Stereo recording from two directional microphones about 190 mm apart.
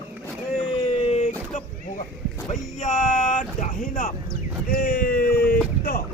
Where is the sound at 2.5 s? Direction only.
40° left (ahead or behind).